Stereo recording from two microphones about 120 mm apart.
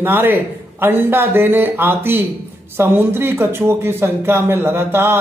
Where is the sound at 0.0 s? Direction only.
15° right (ahead or behind).